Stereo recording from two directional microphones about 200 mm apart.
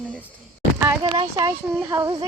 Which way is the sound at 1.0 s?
25° right (ahead or behind).